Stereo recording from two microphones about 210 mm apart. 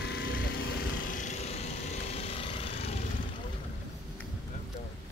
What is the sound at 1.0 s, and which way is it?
Vehicle, 35° left (ahead or behind).